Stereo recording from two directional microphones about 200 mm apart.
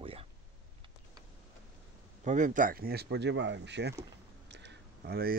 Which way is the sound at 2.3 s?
40° right (ahead or behind).